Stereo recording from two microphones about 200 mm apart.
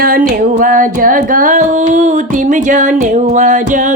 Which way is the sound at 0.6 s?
45° right (ahead or behind).